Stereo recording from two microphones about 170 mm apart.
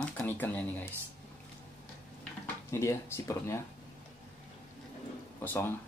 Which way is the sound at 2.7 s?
15° left (ahead or behind).